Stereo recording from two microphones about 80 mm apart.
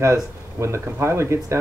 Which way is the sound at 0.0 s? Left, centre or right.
Right.